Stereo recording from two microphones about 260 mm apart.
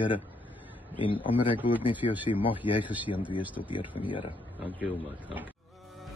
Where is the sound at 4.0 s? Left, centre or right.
Centre.